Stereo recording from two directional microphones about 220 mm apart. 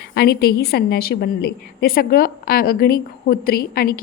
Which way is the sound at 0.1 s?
50° left (ahead or behind).